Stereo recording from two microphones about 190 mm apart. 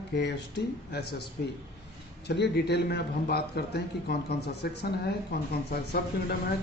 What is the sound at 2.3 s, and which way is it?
Speech, 60° left (ahead or behind).